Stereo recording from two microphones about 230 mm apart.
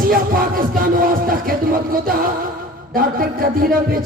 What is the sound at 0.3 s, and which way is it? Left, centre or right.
Music, right.